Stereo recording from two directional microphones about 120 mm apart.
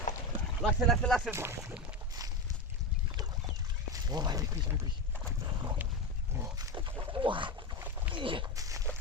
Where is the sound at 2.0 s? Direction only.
30° right (ahead or behind).